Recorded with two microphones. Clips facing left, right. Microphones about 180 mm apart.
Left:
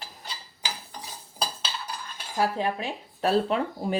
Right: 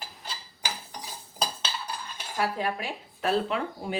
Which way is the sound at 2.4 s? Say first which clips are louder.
Left 3 dB; 25° left (ahead or behind).